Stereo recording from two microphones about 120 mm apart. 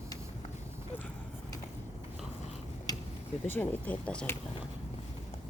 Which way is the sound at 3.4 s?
15° left (ahead or behind).